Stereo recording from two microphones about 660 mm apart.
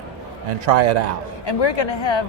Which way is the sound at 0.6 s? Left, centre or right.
Right.